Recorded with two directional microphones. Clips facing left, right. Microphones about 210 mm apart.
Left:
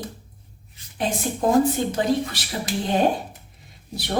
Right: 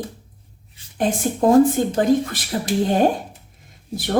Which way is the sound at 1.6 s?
50° right (ahead or behind).